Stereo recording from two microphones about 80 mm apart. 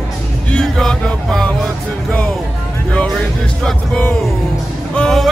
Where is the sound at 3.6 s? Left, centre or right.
Centre.